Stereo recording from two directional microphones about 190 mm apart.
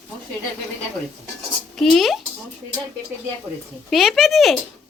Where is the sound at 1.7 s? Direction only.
Centre (ahead or behind).